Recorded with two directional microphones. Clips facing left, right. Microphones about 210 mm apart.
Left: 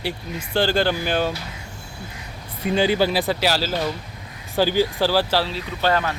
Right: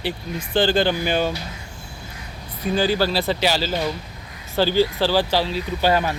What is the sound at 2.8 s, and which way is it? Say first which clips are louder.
Speech: left 1 dB; 20° left (ahead or behind).